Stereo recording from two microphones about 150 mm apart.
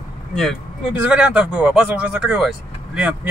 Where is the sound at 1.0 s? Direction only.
5° right (ahead or behind).